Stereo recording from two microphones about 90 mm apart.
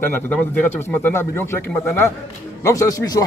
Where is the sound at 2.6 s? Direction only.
40° left (ahead or behind).